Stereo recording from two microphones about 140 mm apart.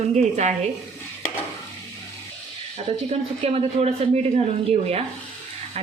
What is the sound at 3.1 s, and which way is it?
A woman's voice, 45° right (ahead or behind).